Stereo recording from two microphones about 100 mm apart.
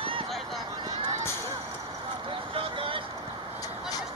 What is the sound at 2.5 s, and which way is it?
Vehicle, 65° right (ahead or behind).